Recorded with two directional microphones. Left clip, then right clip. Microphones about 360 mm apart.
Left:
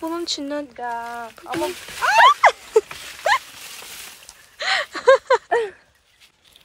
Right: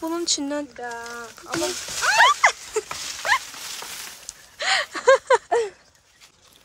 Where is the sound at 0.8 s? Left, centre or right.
Centre.